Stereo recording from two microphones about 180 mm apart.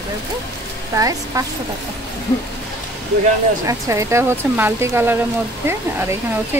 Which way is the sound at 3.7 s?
15° right (ahead or behind).